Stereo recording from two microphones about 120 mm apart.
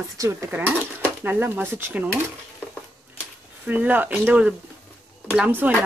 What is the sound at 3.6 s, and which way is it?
Speech, 15° right (ahead or behind).